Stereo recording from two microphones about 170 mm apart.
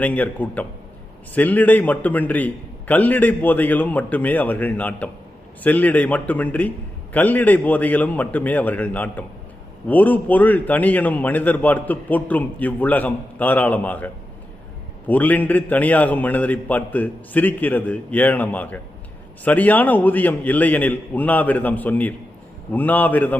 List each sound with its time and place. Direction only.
0.0 s a man's voice: 10° left (ahead or behind)